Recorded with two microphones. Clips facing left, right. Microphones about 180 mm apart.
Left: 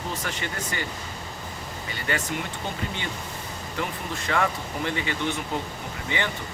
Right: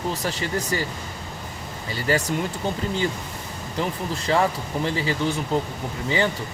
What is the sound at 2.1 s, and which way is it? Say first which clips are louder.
Speech: right 7 dB; 35° right (ahead or behind).